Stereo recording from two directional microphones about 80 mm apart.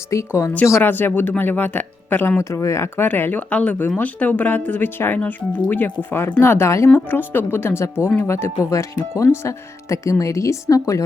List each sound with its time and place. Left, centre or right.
0.1 s speech: left
0.8 s speech: left
2.4 s speech: left